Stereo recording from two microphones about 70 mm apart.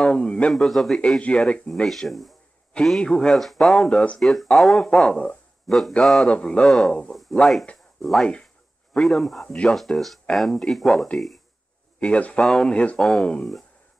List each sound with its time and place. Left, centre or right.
0.0 s speech: centre
3.9 s speech: centre
4.2 s speech: centre
5.7 s speech: centre
6.3 s speech: centre
8.0 s speech: centre
12.0 s speech: centre
12.4 s speech: centre
12.7 s speech: centre